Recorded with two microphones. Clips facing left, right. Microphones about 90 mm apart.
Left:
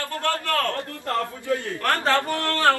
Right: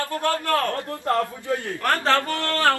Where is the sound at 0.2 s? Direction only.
15° right (ahead or behind).